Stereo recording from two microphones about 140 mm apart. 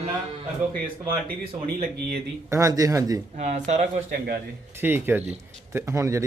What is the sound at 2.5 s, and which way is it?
Speech, 25° right (ahead or behind).